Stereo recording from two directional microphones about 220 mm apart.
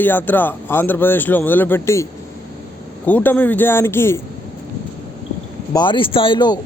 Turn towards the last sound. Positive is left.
turn(degrees=20)  # may be behind; listen again after turning